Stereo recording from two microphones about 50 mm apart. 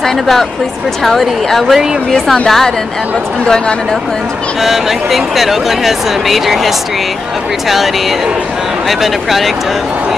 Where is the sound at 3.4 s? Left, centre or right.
Centre.